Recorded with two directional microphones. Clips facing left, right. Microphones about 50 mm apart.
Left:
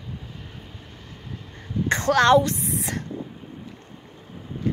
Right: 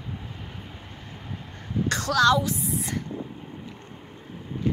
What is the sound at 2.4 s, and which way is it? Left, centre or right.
Speech, left.